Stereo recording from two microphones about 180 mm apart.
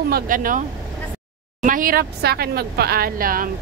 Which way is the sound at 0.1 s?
50° right (ahead or behind).